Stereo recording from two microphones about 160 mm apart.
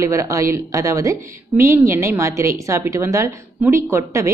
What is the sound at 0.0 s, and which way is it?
A woman's voice, 20° right (ahead or behind).